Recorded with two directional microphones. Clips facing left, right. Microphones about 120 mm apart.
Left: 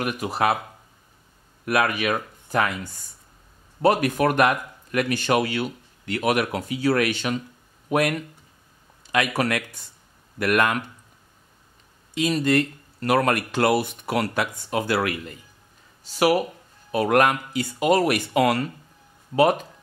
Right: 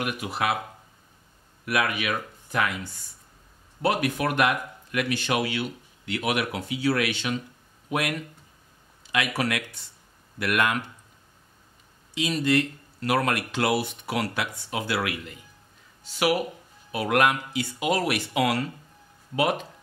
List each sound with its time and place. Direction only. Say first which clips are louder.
0.0 s speech: left 4 dB; 40° left (ahead or behind)
1.7 s speech: left 4 dB; 40° left (ahead or behind)
12.1 s speech: left 3 dB; 50° left (ahead or behind)